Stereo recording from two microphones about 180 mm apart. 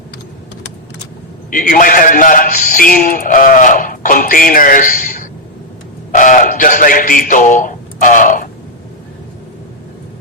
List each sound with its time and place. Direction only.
1.5 s speech: 50° left (ahead or behind)